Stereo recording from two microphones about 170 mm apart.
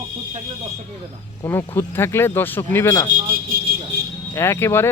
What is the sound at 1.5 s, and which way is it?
Speech, 10° left (ahead or behind).